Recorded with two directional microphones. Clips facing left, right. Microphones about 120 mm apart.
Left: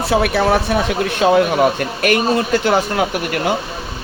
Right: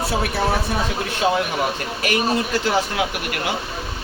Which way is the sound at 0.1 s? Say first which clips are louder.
Left 10 dB; 75° left (ahead or behind).